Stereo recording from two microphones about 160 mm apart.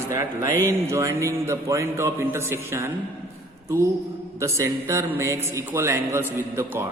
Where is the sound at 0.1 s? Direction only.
20° right (ahead or behind).